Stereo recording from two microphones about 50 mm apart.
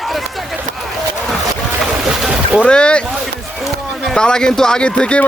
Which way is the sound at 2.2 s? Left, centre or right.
Centre.